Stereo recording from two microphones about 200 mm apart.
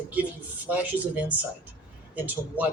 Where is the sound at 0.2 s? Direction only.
10° right (ahead or behind).